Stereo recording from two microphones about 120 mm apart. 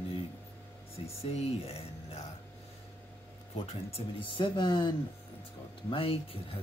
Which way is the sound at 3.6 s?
50° left (ahead or behind).